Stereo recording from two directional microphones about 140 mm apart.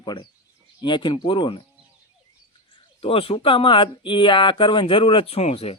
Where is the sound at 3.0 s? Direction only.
40° left (ahead or behind).